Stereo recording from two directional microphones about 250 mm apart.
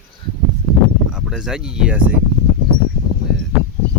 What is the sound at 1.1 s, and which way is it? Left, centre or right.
Speech, centre.